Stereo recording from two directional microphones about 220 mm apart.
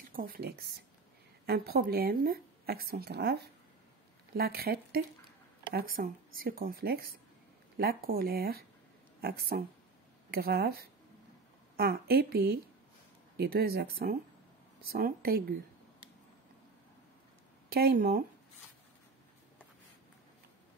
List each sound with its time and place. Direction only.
0.1 s speech: 40° right (ahead or behind)
17.6 s speech: 45° right (ahead or behind)